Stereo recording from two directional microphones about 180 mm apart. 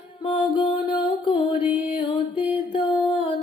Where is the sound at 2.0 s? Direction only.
30° left (ahead or behind).